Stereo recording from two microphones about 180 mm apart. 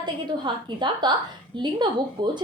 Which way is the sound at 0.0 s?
25° right (ahead or behind).